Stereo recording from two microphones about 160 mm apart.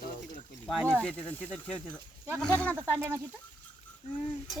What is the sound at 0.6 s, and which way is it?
Speech, 5° left (ahead or behind).